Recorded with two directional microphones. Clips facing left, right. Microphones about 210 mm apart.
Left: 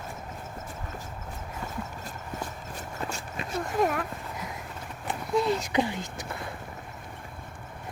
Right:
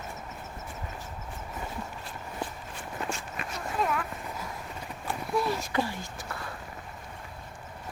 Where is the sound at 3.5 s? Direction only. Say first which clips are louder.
Left 4 dB; 45° left (ahead or behind).